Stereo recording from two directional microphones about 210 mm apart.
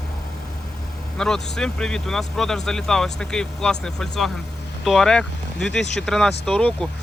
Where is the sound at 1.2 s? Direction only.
5° left (ahead or behind).